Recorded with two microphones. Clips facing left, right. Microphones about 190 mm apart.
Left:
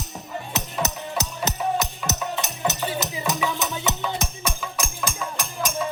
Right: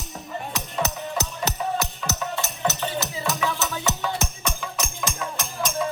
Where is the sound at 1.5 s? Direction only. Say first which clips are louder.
Left 3 dB; 20° left (ahead or behind).